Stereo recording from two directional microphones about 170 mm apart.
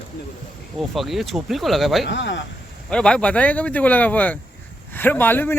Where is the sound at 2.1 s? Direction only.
90° left.